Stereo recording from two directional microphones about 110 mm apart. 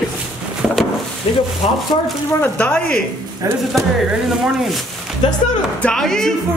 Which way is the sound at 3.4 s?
30° right (ahead or behind).